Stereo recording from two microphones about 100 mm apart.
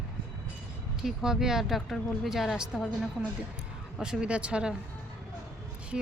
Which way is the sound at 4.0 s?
10° right (ahead or behind).